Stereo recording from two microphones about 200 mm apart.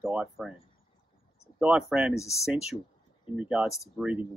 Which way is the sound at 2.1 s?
15° left (ahead or behind).